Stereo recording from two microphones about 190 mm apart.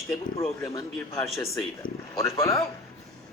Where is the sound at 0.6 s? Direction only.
15° left (ahead or behind).